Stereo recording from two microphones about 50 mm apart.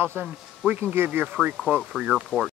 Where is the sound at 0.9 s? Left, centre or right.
Right.